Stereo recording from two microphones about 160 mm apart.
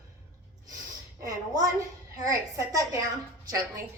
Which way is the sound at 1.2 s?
20° right (ahead or behind).